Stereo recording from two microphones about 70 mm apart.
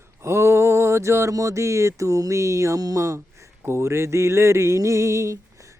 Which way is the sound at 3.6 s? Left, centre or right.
Right.